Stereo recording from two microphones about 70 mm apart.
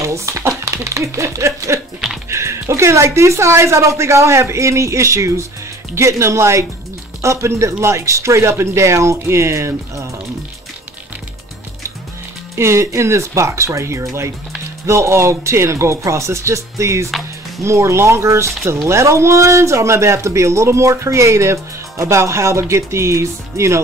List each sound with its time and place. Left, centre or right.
0.0 s speech: right
2.2 s music: right
2.7 s speech: right
12.5 s speech: right